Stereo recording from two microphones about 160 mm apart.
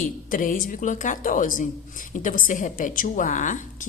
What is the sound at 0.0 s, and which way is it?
A woman's voice, 60° left (ahead or behind).